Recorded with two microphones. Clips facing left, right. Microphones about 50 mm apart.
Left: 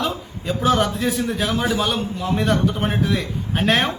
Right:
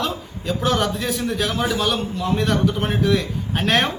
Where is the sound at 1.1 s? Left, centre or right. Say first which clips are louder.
Left 1 dB; centre.